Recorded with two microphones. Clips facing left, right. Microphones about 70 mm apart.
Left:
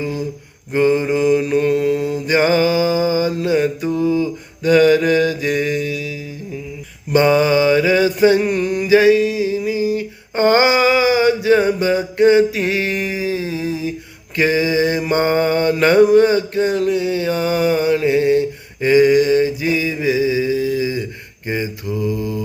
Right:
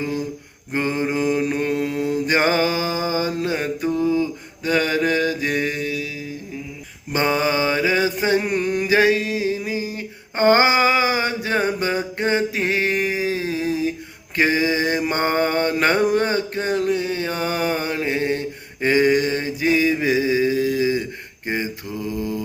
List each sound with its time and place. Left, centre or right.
0.7 s mantra: right
7.1 s mantra: right
8.6 s a sound: right
14.3 s mantra: right
16.1 s a sound: right
21.4 s mantra: right